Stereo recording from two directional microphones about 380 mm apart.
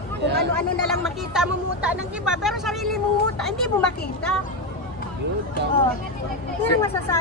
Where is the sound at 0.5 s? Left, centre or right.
Centre.